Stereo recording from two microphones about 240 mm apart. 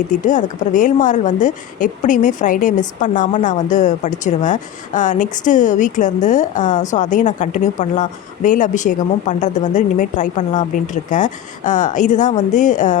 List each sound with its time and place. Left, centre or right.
0.1 s a woman's voice: left